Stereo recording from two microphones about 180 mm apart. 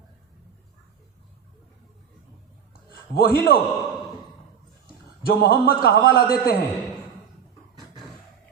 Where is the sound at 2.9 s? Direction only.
55° left (ahead or behind).